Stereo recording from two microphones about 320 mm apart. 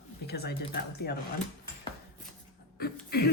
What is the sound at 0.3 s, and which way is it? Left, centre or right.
Speech, left.